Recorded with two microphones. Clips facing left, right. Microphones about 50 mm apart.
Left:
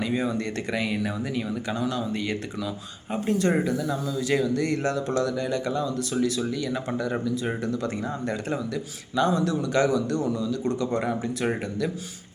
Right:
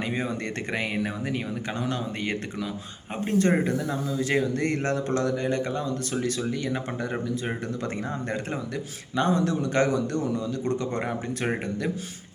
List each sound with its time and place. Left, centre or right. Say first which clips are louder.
0.0 s speech: left 3 dB; right
9.1 s speech: left 1 dB; right